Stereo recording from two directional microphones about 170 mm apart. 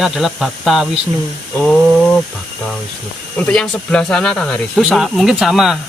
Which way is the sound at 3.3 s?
5° left (ahead or behind).